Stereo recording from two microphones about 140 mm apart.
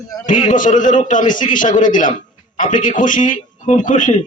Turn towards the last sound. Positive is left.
turn(degrees=65)  # may be behind; listen again after turning